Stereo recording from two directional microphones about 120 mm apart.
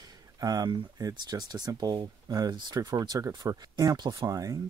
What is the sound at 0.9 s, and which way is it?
Speech, 35° right (ahead or behind).